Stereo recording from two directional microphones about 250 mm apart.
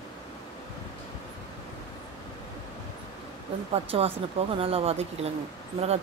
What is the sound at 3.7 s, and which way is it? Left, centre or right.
Speech, right.